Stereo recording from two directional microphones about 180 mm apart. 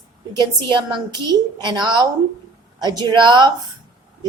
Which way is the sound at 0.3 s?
25° right (ahead or behind).